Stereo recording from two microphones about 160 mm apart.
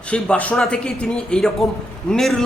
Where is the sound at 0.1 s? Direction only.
10° left (ahead or behind).